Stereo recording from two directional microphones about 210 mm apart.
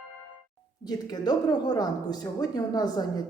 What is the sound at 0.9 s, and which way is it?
Speech, 20° left (ahead or behind).